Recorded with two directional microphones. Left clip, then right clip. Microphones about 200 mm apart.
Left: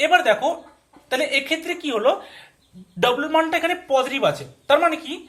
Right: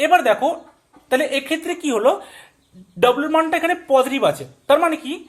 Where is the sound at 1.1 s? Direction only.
40° right (ahead or behind).